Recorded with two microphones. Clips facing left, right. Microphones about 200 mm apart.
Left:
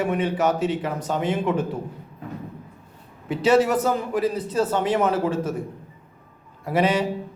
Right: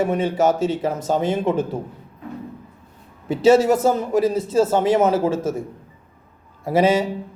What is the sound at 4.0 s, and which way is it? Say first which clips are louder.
Speech: right 5 dB; 45° right (ahead or behind).